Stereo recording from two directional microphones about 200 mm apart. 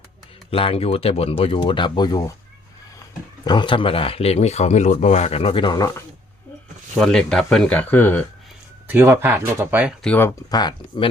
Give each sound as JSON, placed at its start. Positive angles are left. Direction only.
{"t": 0.5, "sound": "speech", "side_deg": 30}
{"t": 3.4, "sound": "speech", "side_deg": 20}
{"t": 7.0, "sound": "speech", "side_deg": 0}
{"t": 8.9, "sound": "speech", "side_deg": -10}
{"t": 10.0, "sound": "speech", "side_deg": 10}